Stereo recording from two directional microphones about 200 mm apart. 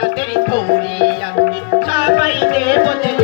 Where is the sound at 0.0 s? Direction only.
55° left (ahead or behind).